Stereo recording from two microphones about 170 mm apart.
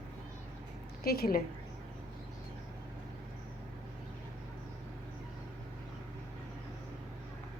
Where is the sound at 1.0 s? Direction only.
65° left (ahead or behind).